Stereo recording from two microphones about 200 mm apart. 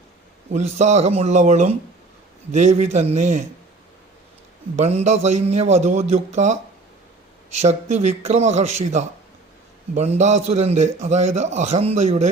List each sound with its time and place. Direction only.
0.5 s a man's voice: 35° right (ahead or behind)
4.8 s a man's voice: 35° right (ahead or behind)